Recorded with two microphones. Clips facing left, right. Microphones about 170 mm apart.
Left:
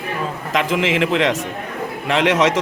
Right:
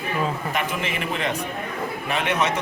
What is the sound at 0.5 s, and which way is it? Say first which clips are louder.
A man's voice: left 8 dB; 90° left.